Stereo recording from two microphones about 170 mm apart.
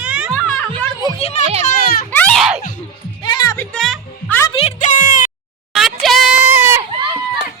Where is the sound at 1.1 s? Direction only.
35° left (ahead or behind).